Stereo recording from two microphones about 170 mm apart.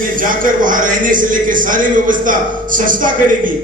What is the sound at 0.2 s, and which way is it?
A man's voice, 55° right (ahead or behind).